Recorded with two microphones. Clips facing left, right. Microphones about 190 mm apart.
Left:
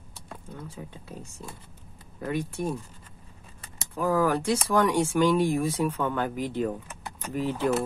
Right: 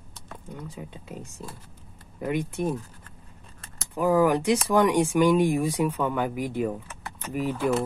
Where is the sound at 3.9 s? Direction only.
15° right (ahead or behind).